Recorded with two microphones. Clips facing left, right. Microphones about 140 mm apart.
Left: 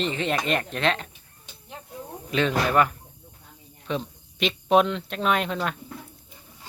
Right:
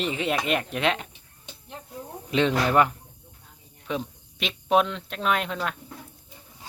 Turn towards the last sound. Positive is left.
turn(degrees=0)  # may be behind; listen again after turning